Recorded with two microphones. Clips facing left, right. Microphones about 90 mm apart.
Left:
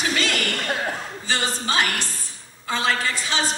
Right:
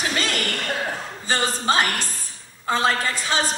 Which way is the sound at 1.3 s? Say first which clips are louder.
Right 3 dB; 40° right (ahead or behind).